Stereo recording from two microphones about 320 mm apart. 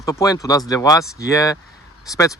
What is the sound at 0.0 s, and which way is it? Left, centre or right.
Speech, centre.